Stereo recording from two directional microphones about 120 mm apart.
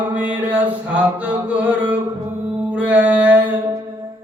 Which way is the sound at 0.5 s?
15° right (ahead or behind).